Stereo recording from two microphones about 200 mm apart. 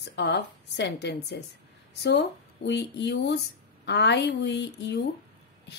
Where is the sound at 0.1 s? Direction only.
60° left (ahead or behind).